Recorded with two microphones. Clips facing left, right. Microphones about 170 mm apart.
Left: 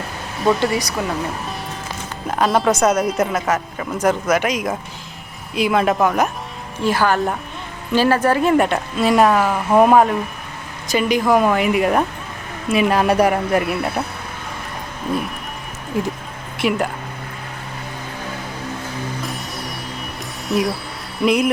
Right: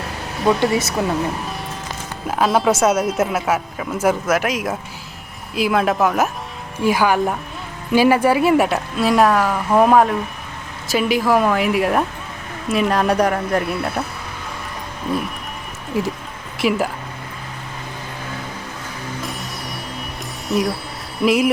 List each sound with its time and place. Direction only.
0.6 s speech: 20° right (ahead or behind)
2.2 s speech: centre (ahead or behind)
15.9 s speech: centre (ahead or behind)
19.2 s music: centre (ahead or behind)
20.5 s speech: centre (ahead or behind)